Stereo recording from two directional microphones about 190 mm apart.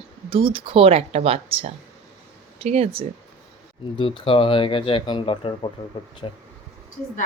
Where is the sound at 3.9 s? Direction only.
25° left (ahead or behind).